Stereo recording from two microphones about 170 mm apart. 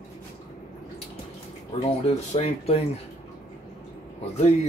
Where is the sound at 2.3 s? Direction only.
40° left (ahead or behind).